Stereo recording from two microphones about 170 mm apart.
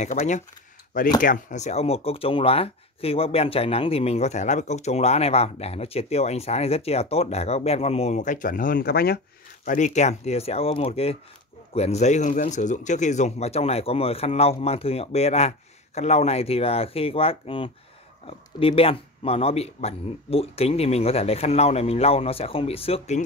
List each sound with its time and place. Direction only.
0.0 s speech: 45° left (ahead or behind); by 9.2 s 65° left (ahead or behind)
9.7 s speech: 45° left (ahead or behind)